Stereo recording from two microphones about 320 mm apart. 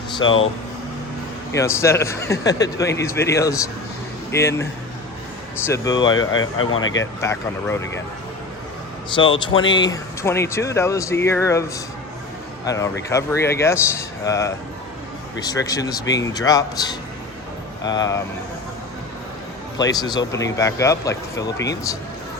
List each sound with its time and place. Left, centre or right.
1.5 s speech: centre
5.6 s speech: centre
6.1 s speech: left
7.2 s speech: centre
9.1 s speech: centre
12.6 s speech: centre
19.8 s speech: centre